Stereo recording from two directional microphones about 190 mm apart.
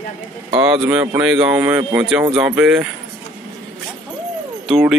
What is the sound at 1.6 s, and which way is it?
Speech, 15° right (ahead or behind).